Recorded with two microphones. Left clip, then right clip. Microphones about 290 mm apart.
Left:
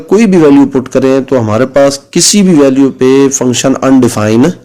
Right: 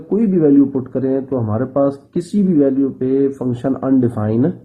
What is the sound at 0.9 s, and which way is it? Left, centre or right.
A man's voice, left.